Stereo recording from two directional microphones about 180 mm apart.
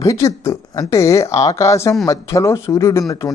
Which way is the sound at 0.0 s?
15° left (ahead or behind).